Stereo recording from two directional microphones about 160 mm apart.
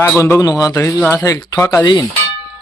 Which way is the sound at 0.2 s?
20° left (ahead or behind).